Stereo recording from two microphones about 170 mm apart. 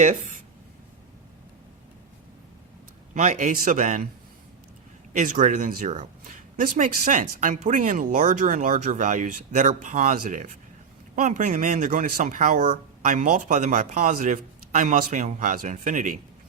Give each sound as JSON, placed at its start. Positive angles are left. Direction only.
{"t": 0.0, "sound": "speech", "side_deg": -45}
{"t": 3.2, "sound": "speech", "side_deg": -45}
{"t": 5.1, "sound": "speech", "side_deg": -50}